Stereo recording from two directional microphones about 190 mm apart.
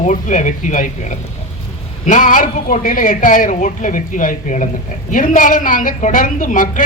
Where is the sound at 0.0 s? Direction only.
40° left (ahead or behind).